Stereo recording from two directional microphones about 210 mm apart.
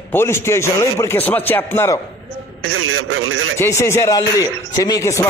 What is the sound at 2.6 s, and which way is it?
Speech, 90° right.